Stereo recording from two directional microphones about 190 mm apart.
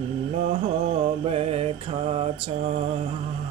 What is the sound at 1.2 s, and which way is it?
Mantra, 30° right (ahead or behind).